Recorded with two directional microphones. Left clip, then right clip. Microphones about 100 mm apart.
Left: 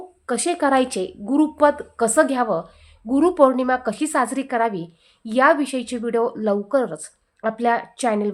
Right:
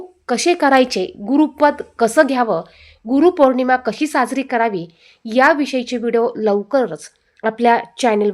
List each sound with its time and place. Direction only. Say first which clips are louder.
0.3 s a woman's voice: right 6 dB; 50° right (ahead or behind); by 2.6 s 30° right (ahead or behind)
3.1 s a woman's voice: right 3 dB; 10° right (ahead or behind); by 8.3 s 40° right (ahead or behind)